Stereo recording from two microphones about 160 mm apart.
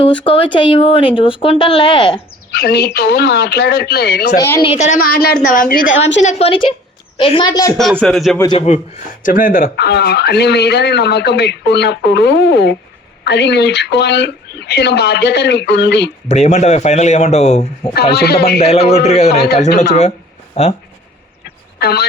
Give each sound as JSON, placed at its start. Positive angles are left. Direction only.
{"t": 0.0, "sound": "speech", "side_deg": 35}
{"t": 2.5, "sound": "speech", "side_deg": 80}
{"t": 4.4, "sound": "a woman's voice", "side_deg": 15}
{"t": 4.6, "sound": "speech", "side_deg": 35}
{"t": 4.9, "sound": "a woman's voice", "side_deg": 60}
{"t": 6.4, "sound": "a woman's voice", "side_deg": 35}
{"t": 8.0, "sound": "speech", "side_deg": 0}
{"t": 8.5, "sound": "speech", "side_deg": 45}
{"t": 9.2, "sound": "speech", "side_deg": 60}
{"t": 16.3, "sound": "speech", "side_deg": 45}
{"t": 18.1, "sound": "speech", "side_deg": 85}
{"t": 19.0, "sound": "speech", "side_deg": 45}
{"t": 20.6, "sound": "speech", "side_deg": 40}
{"t": 21.4, "sound": "vehicle", "side_deg": 85}